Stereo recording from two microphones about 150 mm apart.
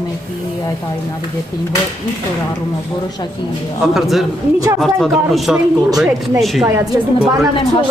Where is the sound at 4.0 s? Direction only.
Centre (ahead or behind).